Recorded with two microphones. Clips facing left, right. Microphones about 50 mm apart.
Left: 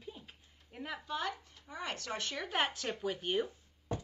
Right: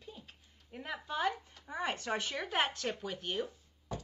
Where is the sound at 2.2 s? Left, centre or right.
Centre.